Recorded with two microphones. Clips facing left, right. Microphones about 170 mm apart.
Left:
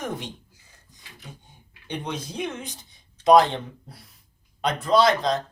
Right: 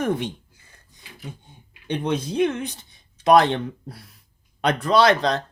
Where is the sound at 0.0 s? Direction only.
60° right (ahead or behind).